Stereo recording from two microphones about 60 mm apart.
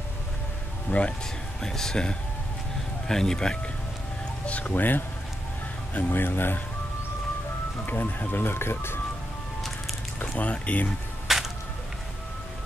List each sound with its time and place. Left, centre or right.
0.8 s speech: left
1.6 s speech: centre
4.5 s speech: left
7.8 s speech: left
10.1 s a sound: left
10.4 s speech: left
11.2 s music: centre